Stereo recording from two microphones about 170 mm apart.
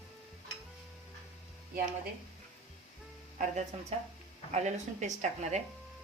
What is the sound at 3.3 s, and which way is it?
Speech, 45° right (ahead or behind).